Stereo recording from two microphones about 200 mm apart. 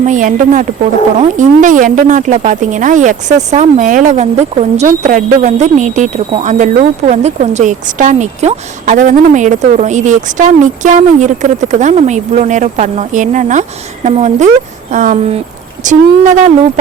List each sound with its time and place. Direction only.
0.0 s a woman's voice: 40° right (ahead or behind)